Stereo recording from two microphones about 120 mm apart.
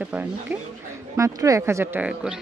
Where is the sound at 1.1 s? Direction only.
25° right (ahead or behind).